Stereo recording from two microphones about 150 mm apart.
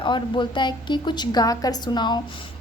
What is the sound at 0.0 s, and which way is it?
A woman's voice, 30° left (ahead or behind).